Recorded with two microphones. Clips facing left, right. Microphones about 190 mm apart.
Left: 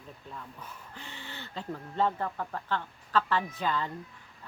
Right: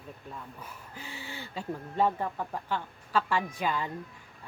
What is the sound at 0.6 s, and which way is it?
Speech, 10° right (ahead or behind).